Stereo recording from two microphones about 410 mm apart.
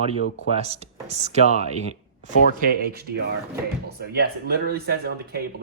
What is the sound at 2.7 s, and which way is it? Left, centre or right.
Speech, right.